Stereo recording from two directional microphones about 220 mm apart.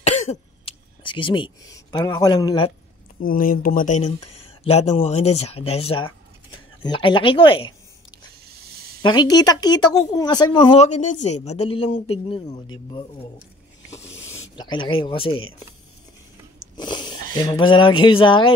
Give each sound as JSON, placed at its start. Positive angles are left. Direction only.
{"t": 0.0, "sound": "speech", "side_deg": 30}
{"t": 3.2, "sound": "a woman's voice", "side_deg": 40}
{"t": 8.7, "sound": "a sound", "side_deg": -45}
{"t": 9.0, "sound": "a woman's voice", "side_deg": 20}
{"t": 14.1, "sound": "a sound", "side_deg": 10}
{"t": 14.6, "sound": "a woman's voice", "side_deg": 20}
{"t": 16.7, "sound": "dog", "side_deg": 20}
{"t": 17.3, "sound": "a woman's voice", "side_deg": 20}